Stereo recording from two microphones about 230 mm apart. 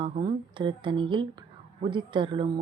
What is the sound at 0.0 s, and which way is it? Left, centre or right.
Speech, right.